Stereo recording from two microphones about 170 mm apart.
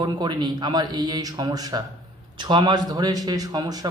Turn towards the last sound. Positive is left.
turn(degrees=-20)  # may be behind; listen again after turning